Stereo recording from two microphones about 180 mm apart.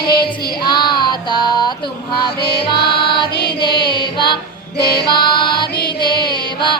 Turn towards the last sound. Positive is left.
turn(degrees=25)  # may be behind; listen again after turning